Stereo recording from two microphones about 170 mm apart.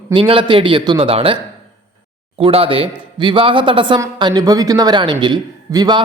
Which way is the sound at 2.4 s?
35° right (ahead or behind).